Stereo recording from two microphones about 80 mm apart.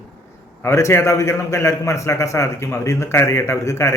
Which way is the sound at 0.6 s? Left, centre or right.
Left.